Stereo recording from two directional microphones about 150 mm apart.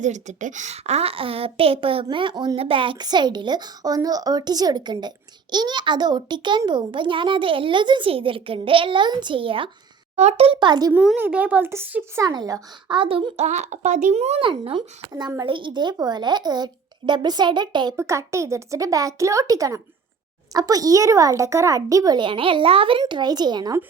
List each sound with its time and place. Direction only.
0.0 s a woman's voice: 55° right (ahead or behind); by 10.9 s 30° right (ahead or behind)
10.9 s a woman's voice: 5° right (ahead or behind)
12.2 s a child's voice: 25° right (ahead or behind)
13.0 s a child's voice: 35° right (ahead or behind)
17.9 s a child's voice: 20° right (ahead or behind)